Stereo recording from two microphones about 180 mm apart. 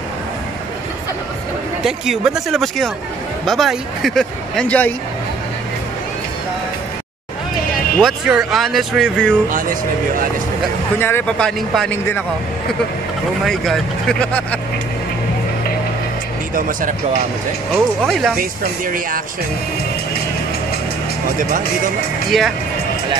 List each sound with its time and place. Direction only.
1.8 s speech: 5° right (ahead or behind)
8.0 s speech: centre (ahead or behind)
9.5 s speech: 50° right (ahead or behind)
11.0 s speech: 10° left (ahead or behind)
13.5 s speech: centre (ahead or behind)
16.5 s speech: 50° right (ahead or behind)
17.6 s speech: 5° left (ahead or behind)
18.4 s speech: 50° right (ahead or behind)
22.3 s speech: centre (ahead or behind)